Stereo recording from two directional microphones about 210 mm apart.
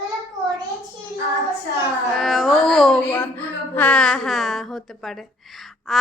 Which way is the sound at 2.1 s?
Centre (ahead or behind).